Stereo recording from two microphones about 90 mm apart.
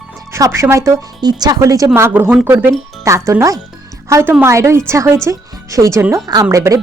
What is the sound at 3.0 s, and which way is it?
Speech, 35° right (ahead or behind).